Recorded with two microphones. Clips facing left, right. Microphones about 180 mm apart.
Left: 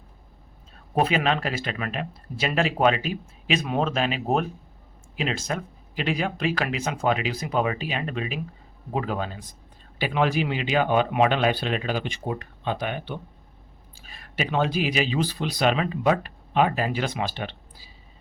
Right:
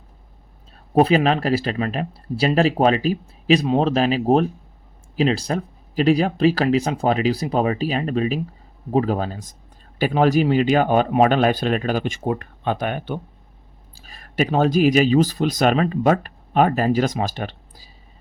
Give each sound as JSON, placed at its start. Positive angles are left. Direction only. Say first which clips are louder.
{"t": 0.9, "sound": "speech", "louder": "right 7 dB", "side_deg": -35}